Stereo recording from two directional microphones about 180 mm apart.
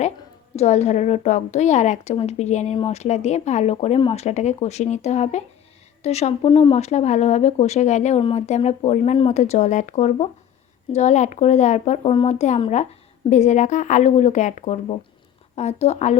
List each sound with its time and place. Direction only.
0.5 s a woman's voice: 40° left (ahead or behind)